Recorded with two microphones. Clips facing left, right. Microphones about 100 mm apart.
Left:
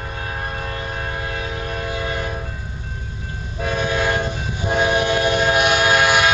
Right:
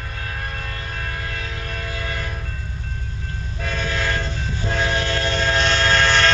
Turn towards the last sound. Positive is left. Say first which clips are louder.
# left 2 dB
turn(degrees=10)  # may be behind; listen again after turning